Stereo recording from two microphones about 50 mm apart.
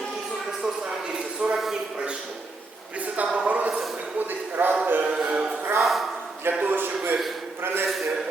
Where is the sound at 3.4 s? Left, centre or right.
Right.